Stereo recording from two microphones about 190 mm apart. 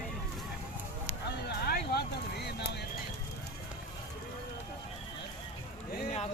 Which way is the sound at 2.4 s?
60° left (ahead or behind).